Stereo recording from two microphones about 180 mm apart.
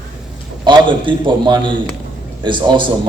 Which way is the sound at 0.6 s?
25° right (ahead or behind).